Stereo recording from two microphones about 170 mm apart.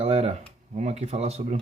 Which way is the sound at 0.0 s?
35° right (ahead or behind).